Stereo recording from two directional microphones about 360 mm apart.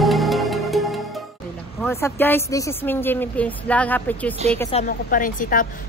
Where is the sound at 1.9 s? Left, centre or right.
Centre.